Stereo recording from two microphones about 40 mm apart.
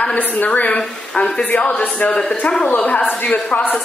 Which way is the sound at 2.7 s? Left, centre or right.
Left.